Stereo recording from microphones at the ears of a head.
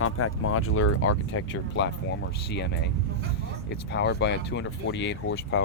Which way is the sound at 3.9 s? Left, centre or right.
Left.